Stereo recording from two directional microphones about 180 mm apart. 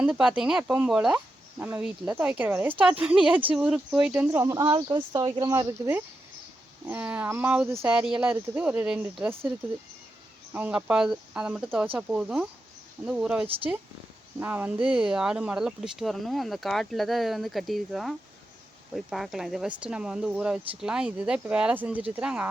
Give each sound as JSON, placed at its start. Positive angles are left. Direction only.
{"t": 0.0, "sound": "speech", "side_deg": -5}
{"t": 10.5, "sound": "speech", "side_deg": -10}